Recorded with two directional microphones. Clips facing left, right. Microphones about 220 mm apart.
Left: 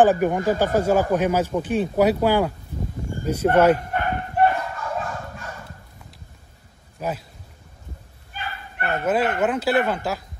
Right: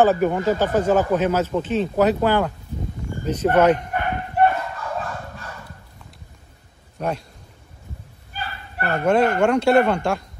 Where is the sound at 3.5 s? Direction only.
5° left (ahead or behind).